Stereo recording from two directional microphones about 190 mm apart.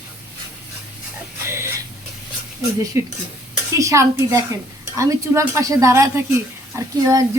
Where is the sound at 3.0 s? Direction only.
15° right (ahead or behind).